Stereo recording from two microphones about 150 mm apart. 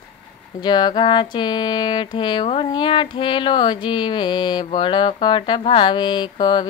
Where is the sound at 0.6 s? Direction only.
30° left (ahead or behind).